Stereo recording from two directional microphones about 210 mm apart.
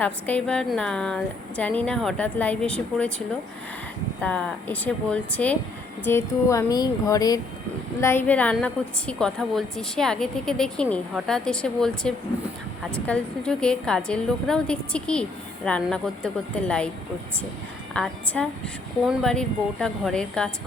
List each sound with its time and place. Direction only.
0.0 s a woman's voice: 5° left (ahead or behind)
17.9 s a woman's voice: 5° left (ahead or behind)